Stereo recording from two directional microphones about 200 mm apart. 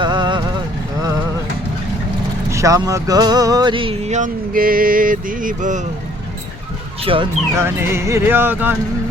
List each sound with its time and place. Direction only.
0.0 s vehicle: 20° right (ahead or behind)
2.5 s speech: 15° right (ahead or behind); by 5.8 s 40° right (ahead or behind)
7.0 s speech: 25° right (ahead or behind)
7.5 s speech: 10° right (ahead or behind)